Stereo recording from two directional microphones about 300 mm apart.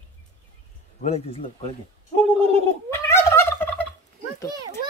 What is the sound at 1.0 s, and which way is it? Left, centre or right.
Speech, centre.